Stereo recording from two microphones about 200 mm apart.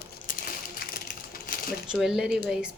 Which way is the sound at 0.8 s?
45° left (ahead or behind).